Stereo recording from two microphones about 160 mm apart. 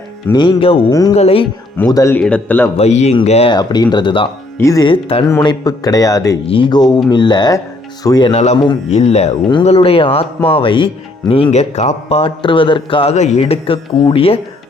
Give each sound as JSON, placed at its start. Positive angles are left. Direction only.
{"t": 0.3, "sound": "a man's voice", "side_deg": 35}
{"t": 0.9, "sound": "a man's voice", "side_deg": 20}
{"t": 1.1, "sound": "a man's voice", "side_deg": 40}
{"t": 1.9, "sound": "a man's voice", "side_deg": 20}
{"t": 2.1, "sound": "a man's voice", "side_deg": 10}
{"t": 2.7, "sound": "a man's voice", "side_deg": 45}
{"t": 3.5, "sound": "a man's voice", "side_deg": 25}
{"t": 4.5, "sound": "a man's voice", "side_deg": 20}
{"t": 4.9, "sound": "a man's voice", "side_deg": 35}
{"t": 5.2, "sound": "a man's voice", "side_deg": 25}
{"t": 8.3, "sound": "a man's voice", "side_deg": 45}
{"t": 11.5, "sound": "a man's voice", "side_deg": 45}